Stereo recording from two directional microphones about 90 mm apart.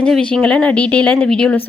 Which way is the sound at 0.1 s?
15° left (ahead or behind).